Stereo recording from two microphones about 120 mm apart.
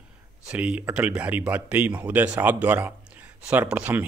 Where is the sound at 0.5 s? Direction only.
10° right (ahead or behind).